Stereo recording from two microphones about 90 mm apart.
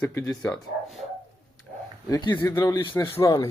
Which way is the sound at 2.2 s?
55° left (ahead or behind).